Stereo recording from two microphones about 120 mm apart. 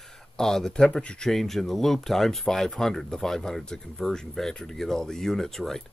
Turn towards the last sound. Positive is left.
turn(degrees=5)  # may be behind; listen again after turning